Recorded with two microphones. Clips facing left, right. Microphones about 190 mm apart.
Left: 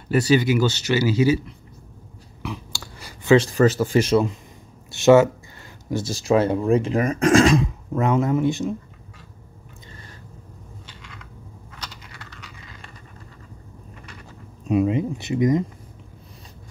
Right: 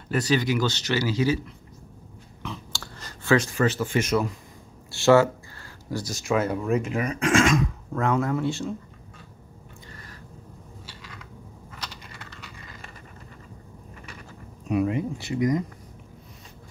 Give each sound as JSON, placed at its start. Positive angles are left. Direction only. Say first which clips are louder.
{"t": 0.1, "sound": "speech", "louder": "left 5 dB", "side_deg": 10}
{"t": 2.4, "sound": "chewing", "louder": "left 4 dB", "side_deg": 10}
{"t": 3.3, "sound": "speech", "louder": "left 7 dB", "side_deg": 35}
{"t": 7.0, "sound": "speech", "louder": "left 6 dB", "side_deg": 45}
{"t": 7.6, "sound": "speech", "louder": "left 3 dB", "side_deg": 20}
{"t": 10.9, "sound": "a sound", "louder": "even", "side_deg": -5}
{"t": 14.7, "sound": "speech", "louder": "left 4 dB", "side_deg": 20}